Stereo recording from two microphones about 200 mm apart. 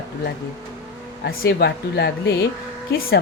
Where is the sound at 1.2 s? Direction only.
50° left (ahead or behind).